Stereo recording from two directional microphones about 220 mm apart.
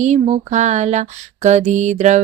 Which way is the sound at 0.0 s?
30° right (ahead or behind).